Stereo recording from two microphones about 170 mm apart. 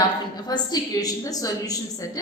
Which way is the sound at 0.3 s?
25° left (ahead or behind).